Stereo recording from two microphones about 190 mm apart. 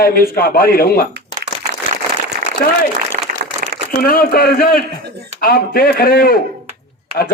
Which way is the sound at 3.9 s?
50° left (ahead or behind).